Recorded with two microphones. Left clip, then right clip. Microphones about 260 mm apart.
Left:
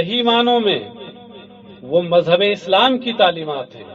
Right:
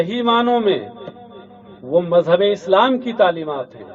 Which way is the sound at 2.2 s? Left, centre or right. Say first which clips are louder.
Even; left.